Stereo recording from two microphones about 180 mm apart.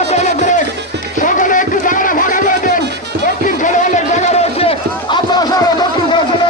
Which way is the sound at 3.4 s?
45° left (ahead or behind).